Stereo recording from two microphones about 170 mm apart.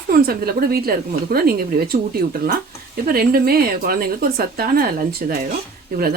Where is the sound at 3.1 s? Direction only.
65° right (ahead or behind).